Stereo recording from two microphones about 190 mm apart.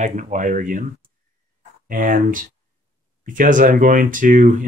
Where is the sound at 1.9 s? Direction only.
45° right (ahead or behind).